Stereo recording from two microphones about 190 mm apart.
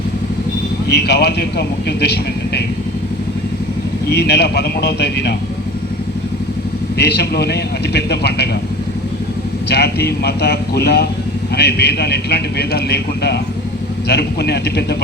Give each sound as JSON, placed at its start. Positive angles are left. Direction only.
{"t": 0.9, "sound": "a man's voice", "side_deg": 60}
{"t": 4.1, "sound": "a man's voice", "side_deg": 60}
{"t": 7.0, "sound": "a man's voice", "side_deg": 60}
{"t": 9.6, "sound": "a man's voice", "side_deg": 60}